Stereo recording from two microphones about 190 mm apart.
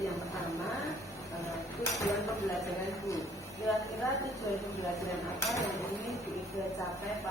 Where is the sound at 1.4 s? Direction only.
15° left (ahead or behind).